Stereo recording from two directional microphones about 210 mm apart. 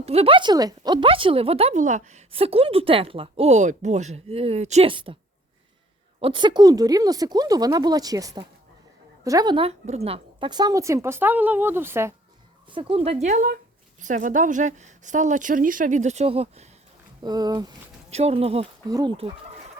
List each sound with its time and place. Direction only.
0.0 s speech: 30° right (ahead or behind)
6.1 s a woman's voice: 25° right (ahead or behind)
12.7 s speech: 25° right (ahead or behind)
18.1 s speech: 30° right (ahead or behind)